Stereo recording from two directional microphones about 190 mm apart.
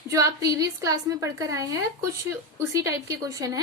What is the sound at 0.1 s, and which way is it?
Speech, 15° right (ahead or behind).